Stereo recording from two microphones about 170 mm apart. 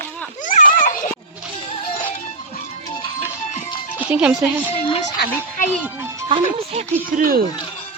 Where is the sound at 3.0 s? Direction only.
35° left (ahead or behind).